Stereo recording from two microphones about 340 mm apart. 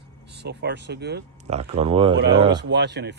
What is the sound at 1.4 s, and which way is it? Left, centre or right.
Speech, centre.